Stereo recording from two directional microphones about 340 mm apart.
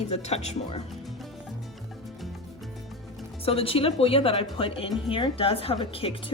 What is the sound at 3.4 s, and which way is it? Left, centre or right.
Speech, centre.